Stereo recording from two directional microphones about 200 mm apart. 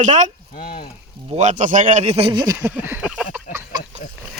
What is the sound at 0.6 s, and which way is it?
Speech, 50° left (ahead or behind).